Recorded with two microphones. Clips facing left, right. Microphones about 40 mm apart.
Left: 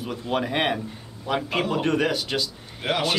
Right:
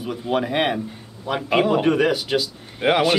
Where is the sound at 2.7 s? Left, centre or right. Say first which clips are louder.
Right 7 dB; right.